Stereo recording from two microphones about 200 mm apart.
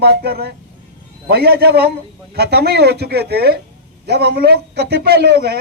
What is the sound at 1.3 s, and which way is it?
A man's voice, 50° right (ahead or behind).